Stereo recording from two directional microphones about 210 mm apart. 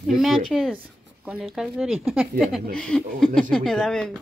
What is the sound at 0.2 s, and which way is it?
Speech, centre (ahead or behind).